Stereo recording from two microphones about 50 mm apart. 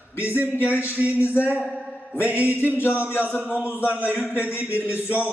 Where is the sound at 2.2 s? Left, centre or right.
Right.